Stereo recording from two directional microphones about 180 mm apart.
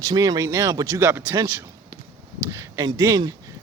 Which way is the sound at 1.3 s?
25° right (ahead or behind).